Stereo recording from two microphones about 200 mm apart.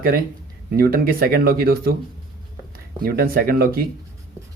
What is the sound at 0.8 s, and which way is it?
Speech, 50° right (ahead or behind).